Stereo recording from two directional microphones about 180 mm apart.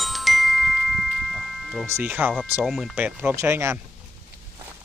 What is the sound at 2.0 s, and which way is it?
Speech, 10° right (ahead or behind).